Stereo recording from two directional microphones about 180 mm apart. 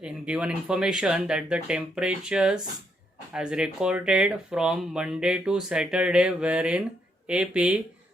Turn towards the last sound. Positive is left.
turn(degrees=-5)  # may be behind; listen again after turning